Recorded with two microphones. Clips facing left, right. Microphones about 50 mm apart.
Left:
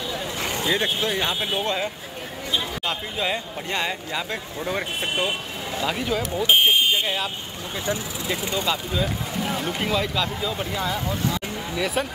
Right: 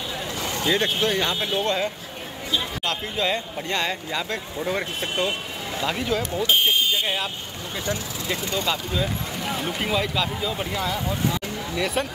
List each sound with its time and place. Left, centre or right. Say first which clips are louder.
0.4 s a sound: left 1 dB; left
0.7 s speech: right 2 dB; centre
5.0 s speech: even; centre
5.8 s speech: even; centre
6.3 s speech: left 3 dB; left
8.3 s speech: even; centre
8.6 s speech: left 1 dB; centre